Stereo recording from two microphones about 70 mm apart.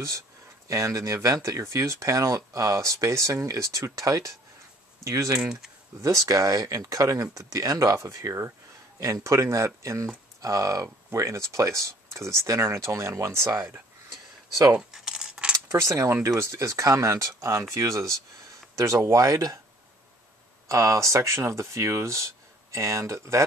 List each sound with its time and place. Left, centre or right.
0.7 s speech: right
14.9 s coin: centre
15.7 s speech: right
20.6 s speech: right